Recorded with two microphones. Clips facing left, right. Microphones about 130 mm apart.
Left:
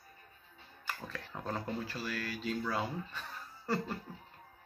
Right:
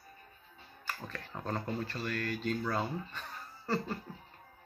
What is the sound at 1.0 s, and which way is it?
Speech, 5° left (ahead or behind).